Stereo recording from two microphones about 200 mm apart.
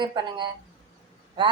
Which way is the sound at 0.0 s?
25° right (ahead or behind).